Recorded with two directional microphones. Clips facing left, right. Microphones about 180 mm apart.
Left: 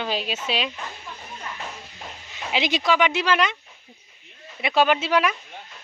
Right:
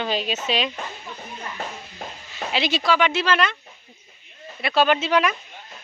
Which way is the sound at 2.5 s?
15° left (ahead or behind).